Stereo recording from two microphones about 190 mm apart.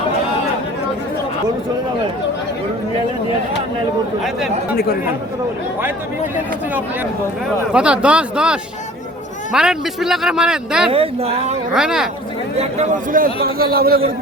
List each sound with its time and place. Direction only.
7.7 s speech: 5° right (ahead or behind)
10.9 s speech: 30° right (ahead or behind)
11.7 s speech: 5° right (ahead or behind)
12.5 s a man's voice: 35° right (ahead or behind); by 14.0 s 50° right (ahead or behind)